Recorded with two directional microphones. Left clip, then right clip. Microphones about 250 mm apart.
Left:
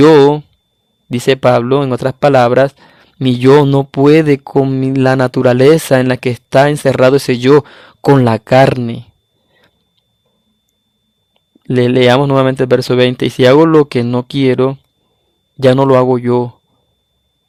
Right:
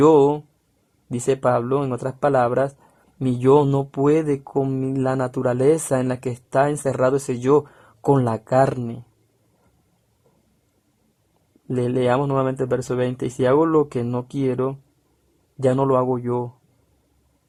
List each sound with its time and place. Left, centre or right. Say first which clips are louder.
0.0 s speech: left 9 dB; left
4.8 s speech: left 11 dB; left
6.1 s speech: left 11 dB; left
6.5 s speech: left 10 dB; left
11.7 s speech: left 11 dB; left